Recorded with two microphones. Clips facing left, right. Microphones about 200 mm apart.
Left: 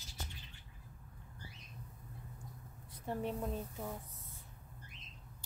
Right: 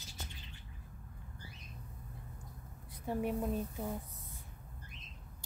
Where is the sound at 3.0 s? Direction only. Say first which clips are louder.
Right 3 dB; 10° right (ahead or behind).